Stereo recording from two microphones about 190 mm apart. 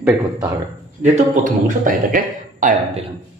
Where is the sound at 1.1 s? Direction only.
45° right (ahead or behind).